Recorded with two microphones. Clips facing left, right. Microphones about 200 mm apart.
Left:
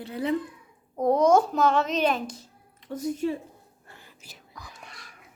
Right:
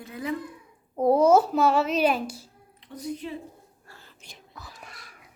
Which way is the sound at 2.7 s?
45° left (ahead or behind).